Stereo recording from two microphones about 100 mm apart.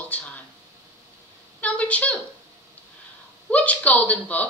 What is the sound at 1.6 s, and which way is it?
Speech, 15° left (ahead or behind).